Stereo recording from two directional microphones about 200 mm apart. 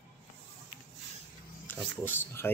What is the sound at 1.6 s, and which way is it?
Speech, 10° left (ahead or behind).